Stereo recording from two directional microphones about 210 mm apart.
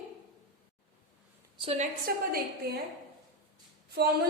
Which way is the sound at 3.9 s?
50° right (ahead or behind).